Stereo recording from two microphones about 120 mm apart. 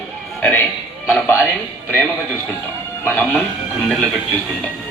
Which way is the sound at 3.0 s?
15° left (ahead or behind).